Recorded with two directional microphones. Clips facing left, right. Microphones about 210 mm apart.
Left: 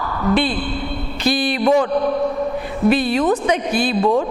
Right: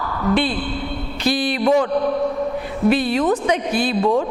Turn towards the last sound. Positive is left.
turn(degrees=25)  # may be behind; listen again after turning